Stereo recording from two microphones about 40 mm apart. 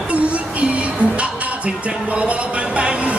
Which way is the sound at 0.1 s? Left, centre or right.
Right.